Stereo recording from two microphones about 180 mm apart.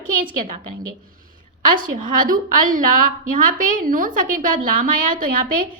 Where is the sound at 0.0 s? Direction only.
50° right (ahead or behind).